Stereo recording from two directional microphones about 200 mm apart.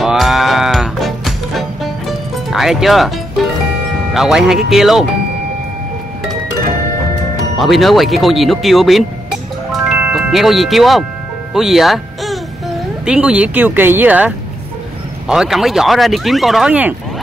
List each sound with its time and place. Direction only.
0.0 s music: centre (ahead or behind)
4.1 s speech: centre (ahead or behind)
7.5 s speech: centre (ahead or behind)
9.7 s music: 5° right (ahead or behind)
11.5 s speech: centre (ahead or behind)